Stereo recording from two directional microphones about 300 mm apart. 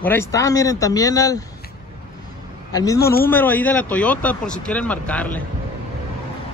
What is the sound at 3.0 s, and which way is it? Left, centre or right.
Speech, left.